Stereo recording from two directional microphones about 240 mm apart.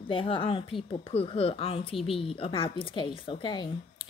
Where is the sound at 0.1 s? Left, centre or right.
Left.